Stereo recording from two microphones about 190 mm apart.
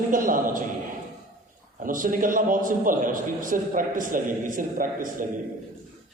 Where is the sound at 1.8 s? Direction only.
45° right (ahead or behind).